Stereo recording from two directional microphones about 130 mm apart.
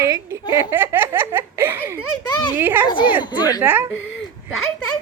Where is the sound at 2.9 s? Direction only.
35° left (ahead or behind).